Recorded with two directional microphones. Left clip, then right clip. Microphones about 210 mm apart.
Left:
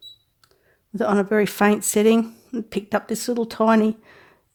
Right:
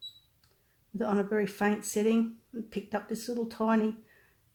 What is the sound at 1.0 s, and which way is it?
A woman's voice, 45° left (ahead or behind).